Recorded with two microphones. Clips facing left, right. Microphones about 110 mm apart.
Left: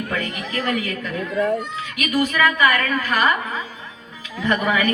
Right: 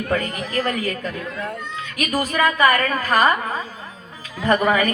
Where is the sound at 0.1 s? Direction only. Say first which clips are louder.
Right 3 dB; 40° right (ahead or behind).